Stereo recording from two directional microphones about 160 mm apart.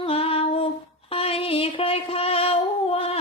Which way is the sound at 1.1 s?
35° left (ahead or behind).